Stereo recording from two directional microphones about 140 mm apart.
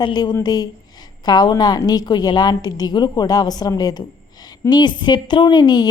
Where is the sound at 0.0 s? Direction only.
30° left (ahead or behind).